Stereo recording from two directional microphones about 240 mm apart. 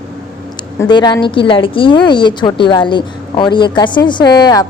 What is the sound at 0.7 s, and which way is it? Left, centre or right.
A woman's voice, centre.